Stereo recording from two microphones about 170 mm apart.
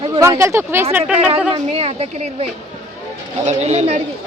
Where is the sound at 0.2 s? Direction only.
15° right (ahead or behind).